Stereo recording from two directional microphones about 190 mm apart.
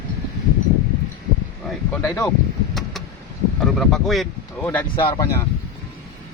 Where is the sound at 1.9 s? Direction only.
10° left (ahead or behind).